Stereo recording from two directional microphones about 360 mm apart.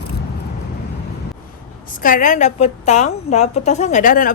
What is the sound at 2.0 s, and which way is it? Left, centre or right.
A woman's voice, left.